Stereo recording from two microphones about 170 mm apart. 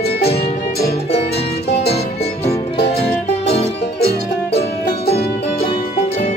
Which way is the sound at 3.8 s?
70° left (ahead or behind).